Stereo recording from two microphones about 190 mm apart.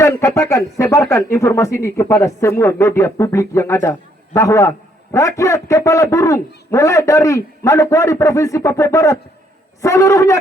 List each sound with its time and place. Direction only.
0.0 s a man's voice: 15° left (ahead or behind)